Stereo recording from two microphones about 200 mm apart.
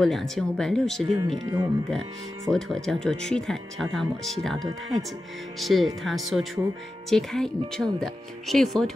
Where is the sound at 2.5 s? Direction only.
Centre (ahead or behind).